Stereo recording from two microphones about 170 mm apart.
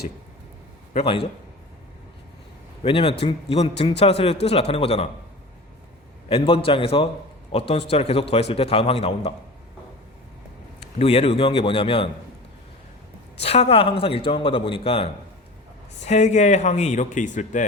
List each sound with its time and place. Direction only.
0.9 s a man's voice: 30° left (ahead or behind)
2.8 s a man's voice: 30° left (ahead or behind)
6.2 s a man's voice: 35° left (ahead or behind)
10.8 s a man's voice: 35° left (ahead or behind)
13.4 s a man's voice: 35° left (ahead or behind)
16.0 s speech: 45° left (ahead or behind)